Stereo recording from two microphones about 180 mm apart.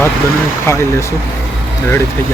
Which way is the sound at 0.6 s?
15° left (ahead or behind).